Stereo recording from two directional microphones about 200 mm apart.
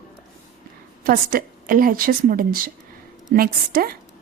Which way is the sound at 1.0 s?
45° right (ahead or behind).